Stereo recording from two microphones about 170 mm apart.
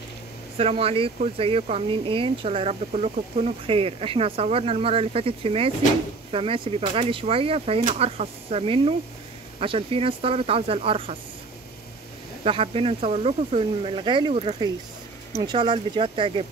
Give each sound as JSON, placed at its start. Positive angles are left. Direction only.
{"t": 0.6, "sound": "speech", "side_deg": -35}
{"t": 12.4, "sound": "speech", "side_deg": -35}